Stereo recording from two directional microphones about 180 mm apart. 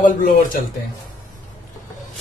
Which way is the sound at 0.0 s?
50° left (ahead or behind).